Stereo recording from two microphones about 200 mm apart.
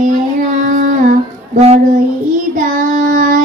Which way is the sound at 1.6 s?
35° right (ahead or behind).